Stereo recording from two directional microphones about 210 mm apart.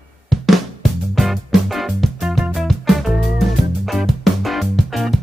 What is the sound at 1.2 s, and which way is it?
Music, centre (ahead or behind).